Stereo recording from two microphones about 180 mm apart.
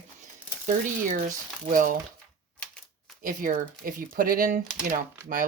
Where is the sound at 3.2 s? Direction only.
45° right (ahead or behind).